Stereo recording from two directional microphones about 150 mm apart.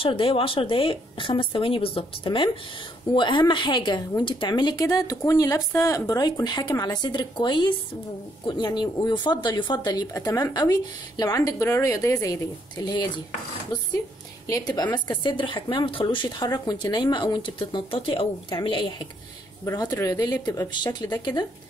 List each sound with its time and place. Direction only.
0.0 s speech: 35° left (ahead or behind)
14.5 s speech: 25° left (ahead or behind)
19.6 s speech: 20° left (ahead or behind)